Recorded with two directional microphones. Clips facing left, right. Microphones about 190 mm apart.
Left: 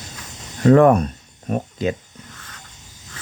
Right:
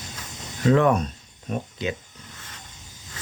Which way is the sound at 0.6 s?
50° left (ahead or behind).